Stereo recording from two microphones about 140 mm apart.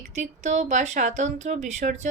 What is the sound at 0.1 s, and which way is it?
Speech, 55° right (ahead or behind).